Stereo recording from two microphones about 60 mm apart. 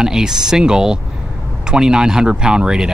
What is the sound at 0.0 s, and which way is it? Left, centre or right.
Speech, centre.